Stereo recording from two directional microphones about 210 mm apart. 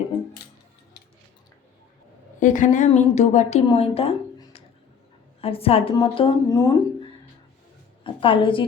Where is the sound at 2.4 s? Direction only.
35° left (ahead or behind); by 6.7 s 15° left (ahead or behind).